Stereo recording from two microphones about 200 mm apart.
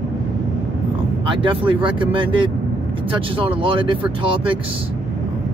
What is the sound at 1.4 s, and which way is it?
Speech, 25° right (ahead or behind).